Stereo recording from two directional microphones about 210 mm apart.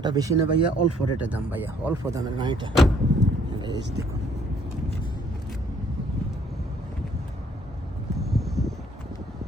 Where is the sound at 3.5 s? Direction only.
20° right (ahead or behind).